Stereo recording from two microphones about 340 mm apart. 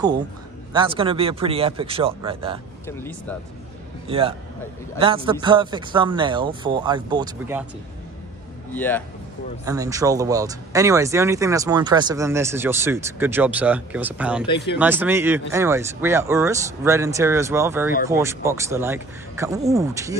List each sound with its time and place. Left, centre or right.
0.7 s speech: centre
3.0 s speech: centre
4.1 s speech: centre
8.7 s speech: centre
9.7 s speech: centre